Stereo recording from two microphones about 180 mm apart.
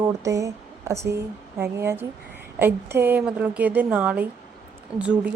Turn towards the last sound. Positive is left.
turn(degrees=-5)  # may be behind; listen again after turning